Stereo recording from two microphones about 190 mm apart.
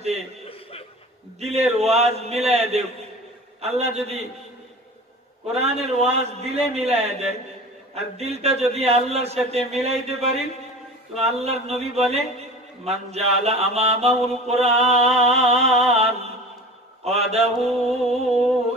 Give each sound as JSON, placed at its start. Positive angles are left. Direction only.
{"t": 0.5, "sound": "chuckle", "side_deg": 30}
{"t": 1.4, "sound": "a man's voice", "side_deg": -35}
{"t": 5.5, "sound": "a man's voice", "side_deg": -35}